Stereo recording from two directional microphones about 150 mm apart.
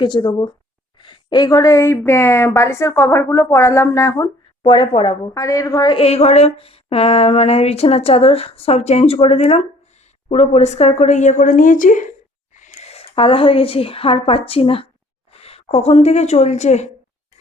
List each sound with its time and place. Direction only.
0.0 s a woman's voice: 30° left (ahead or behind)
4.6 s speech: 35° left (ahead or behind)
5.3 s a woman's voice: 20° left (ahead or behind)
6.0 s speech: 45° left (ahead or behind); by 12.1 s 60° left (ahead or behind)
12.5 s a woman's voice: 50° left (ahead or behind)